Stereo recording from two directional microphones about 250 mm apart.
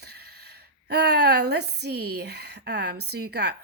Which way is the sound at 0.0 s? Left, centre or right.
Right.